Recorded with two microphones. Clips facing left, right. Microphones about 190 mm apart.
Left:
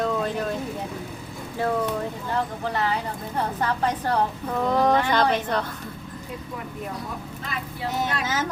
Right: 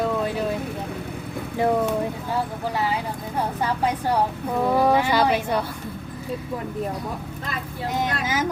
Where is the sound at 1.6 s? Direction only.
15° right (ahead or behind).